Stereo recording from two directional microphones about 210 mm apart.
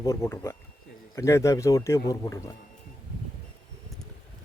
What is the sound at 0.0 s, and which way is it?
A man's voice, 15° left (ahead or behind).